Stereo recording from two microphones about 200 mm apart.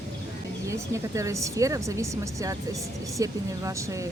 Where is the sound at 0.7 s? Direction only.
15° right (ahead or behind).